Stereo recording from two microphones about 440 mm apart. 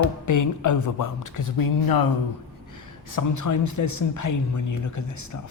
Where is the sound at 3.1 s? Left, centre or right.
Left.